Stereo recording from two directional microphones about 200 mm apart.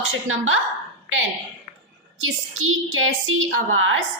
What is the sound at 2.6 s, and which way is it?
A woman's voice, 90° right.